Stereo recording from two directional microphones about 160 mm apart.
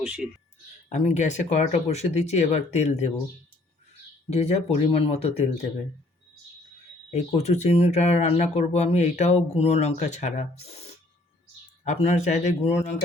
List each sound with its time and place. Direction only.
0.0 s speech: 5° right (ahead or behind)
0.9 s speech: 45° left (ahead or behind)
4.3 s speech: 45° left (ahead or behind)
7.3 s speech: 45° left (ahead or behind)
11.9 s speech: 45° left (ahead or behind)